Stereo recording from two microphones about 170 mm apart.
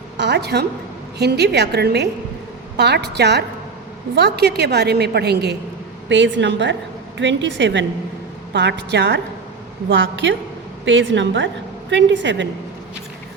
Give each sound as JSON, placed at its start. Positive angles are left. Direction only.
{"t": 0.2, "sound": "a woman's voice", "side_deg": -85}
{"t": 6.1, "sound": "a woman's voice", "side_deg": -90}